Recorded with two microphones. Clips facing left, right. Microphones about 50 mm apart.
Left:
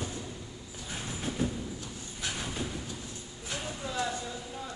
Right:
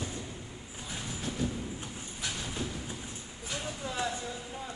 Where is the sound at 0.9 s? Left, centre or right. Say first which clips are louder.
Left 2 dB; left.